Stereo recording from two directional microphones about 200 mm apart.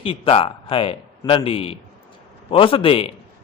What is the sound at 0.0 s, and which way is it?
A man's voice, 25° left (ahead or behind).